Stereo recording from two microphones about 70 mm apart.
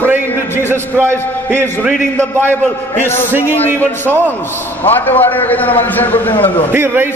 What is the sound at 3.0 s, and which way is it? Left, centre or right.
A man's voice, left.